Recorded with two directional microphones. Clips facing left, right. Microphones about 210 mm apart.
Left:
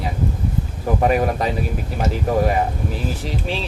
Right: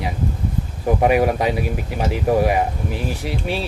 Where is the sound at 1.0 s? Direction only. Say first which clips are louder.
Right 2 dB; 10° right (ahead or behind).